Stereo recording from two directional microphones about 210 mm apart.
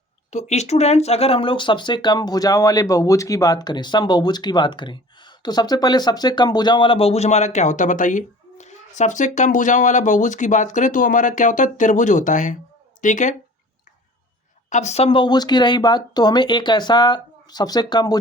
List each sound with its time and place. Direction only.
0.3 s speech: 30° left (ahead or behind)
14.7 s speech: 35° left (ahead or behind)